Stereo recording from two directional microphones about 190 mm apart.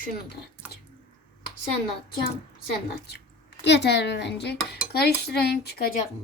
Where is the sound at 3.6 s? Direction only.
65° left (ahead or behind).